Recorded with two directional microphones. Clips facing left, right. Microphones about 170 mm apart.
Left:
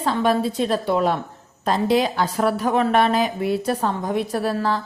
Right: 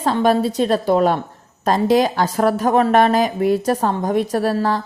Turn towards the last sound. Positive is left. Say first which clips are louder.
# right 4 dB
turn(degrees=-40)  # may be behind; listen again after turning